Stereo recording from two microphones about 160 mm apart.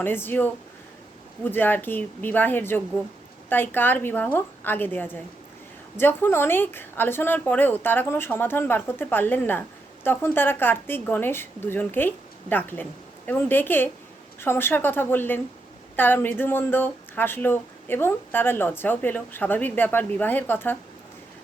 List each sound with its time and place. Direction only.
0.0 s a woman's voice: 15° left (ahead or behind)